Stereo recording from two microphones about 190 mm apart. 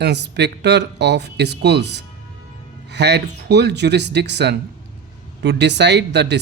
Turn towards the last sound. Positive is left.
turn(degrees=-65)  # may be behind; listen again after turning